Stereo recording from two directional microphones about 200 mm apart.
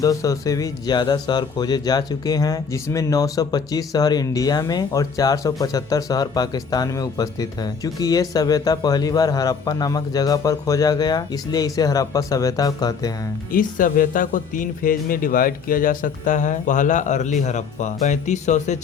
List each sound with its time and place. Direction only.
0.0 s speech: 15° left (ahead or behind)
13.5 s speech: 45° left (ahead or behind)